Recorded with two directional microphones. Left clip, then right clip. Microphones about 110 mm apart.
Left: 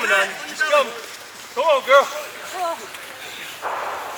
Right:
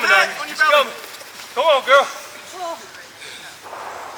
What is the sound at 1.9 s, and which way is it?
Speech, centre (ahead or behind).